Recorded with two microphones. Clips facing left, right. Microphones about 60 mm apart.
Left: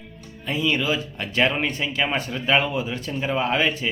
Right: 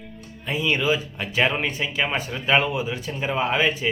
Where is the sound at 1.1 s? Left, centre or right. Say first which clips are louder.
Even; centre.